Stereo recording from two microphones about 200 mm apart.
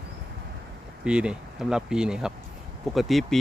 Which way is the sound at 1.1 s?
5° right (ahead or behind).